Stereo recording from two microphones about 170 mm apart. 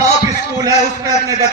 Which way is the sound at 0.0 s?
20° right (ahead or behind).